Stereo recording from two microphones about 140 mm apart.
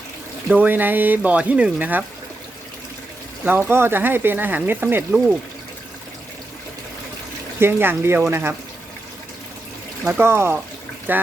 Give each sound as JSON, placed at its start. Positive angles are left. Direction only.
{"t": 0.4, "sound": "speech", "side_deg": -10}
{"t": 3.4, "sound": "speech", "side_deg": -15}
{"t": 7.6, "sound": "speech", "side_deg": -15}
{"t": 10.1, "sound": "speech", "side_deg": -15}